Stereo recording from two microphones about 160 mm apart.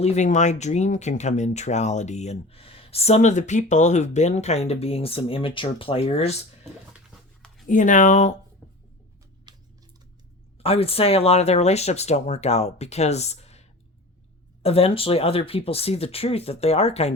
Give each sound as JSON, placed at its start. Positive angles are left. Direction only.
{"t": 0.0, "sound": "speech", "side_deg": 45}
{"t": 7.7, "sound": "speech", "side_deg": 50}
{"t": 9.5, "sound": "a sound", "side_deg": -25}
{"t": 10.6, "sound": "speech", "side_deg": 35}